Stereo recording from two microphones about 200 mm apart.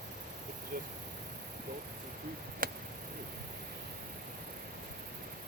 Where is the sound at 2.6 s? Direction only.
45° right (ahead or behind).